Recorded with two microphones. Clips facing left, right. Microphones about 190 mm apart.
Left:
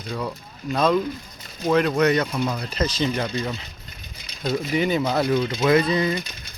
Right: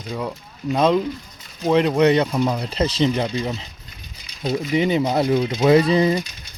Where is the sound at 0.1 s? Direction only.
15° right (ahead or behind).